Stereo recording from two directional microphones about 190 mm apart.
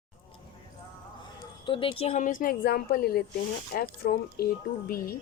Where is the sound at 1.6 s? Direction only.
25° left (ahead or behind).